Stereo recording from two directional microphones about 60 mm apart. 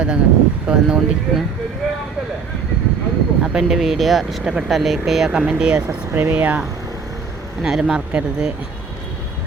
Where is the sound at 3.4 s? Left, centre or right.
Centre.